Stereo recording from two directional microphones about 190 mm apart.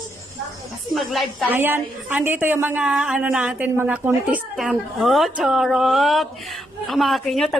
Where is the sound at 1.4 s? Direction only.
10° right (ahead or behind).